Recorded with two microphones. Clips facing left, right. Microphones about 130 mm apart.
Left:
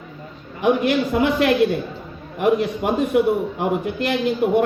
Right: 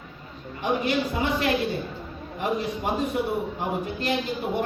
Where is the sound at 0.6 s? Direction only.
60° left (ahead or behind).